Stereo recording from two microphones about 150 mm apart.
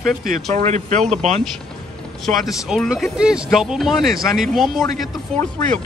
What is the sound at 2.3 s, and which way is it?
Speech, 10° left (ahead or behind).